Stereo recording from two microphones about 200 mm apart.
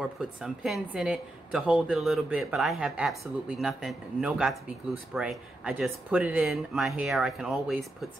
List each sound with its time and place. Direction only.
0.0 s a woman's voice: centre (ahead or behind)